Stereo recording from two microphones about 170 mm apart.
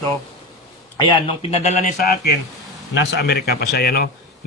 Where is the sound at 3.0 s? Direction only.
80° left; by 4.1 s 65° left (ahead or behind).